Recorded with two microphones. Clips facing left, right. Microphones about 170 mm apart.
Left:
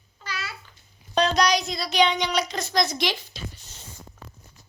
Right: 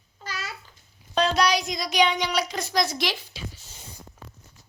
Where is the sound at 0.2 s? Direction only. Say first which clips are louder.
Even; 45° right (ahead or behind).